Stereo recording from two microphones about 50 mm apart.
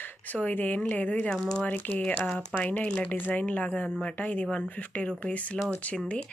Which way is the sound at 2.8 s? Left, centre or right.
Centre.